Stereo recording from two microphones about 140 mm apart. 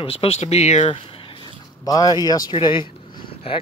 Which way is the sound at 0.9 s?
40° left (ahead or behind).